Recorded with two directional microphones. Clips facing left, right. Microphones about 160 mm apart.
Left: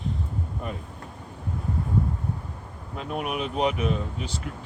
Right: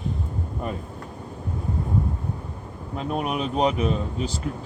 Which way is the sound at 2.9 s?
30° right (ahead or behind).